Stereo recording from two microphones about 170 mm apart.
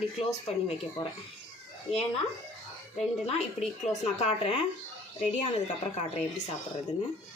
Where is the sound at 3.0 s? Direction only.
40° left (ahead or behind).